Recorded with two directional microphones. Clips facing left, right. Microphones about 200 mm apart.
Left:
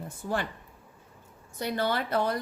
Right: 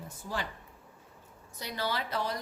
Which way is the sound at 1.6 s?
55° left (ahead or behind).